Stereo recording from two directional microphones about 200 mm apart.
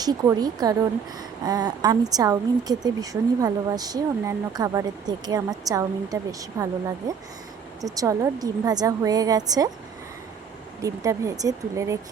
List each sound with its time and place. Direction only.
0.0 s a woman's voice: 20° right (ahead or behind)
7.8 s a woman's voice: 15° right (ahead or behind)
10.8 s a woman's voice: 15° right (ahead or behind)